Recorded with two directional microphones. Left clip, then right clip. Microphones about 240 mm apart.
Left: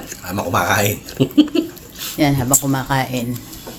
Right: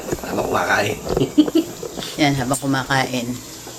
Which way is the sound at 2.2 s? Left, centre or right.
Centre.